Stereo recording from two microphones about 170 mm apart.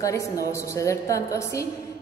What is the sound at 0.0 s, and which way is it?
A woman's voice, 20° left (ahead or behind).